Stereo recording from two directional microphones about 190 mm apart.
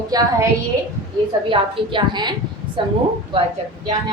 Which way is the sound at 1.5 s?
25° right (ahead or behind).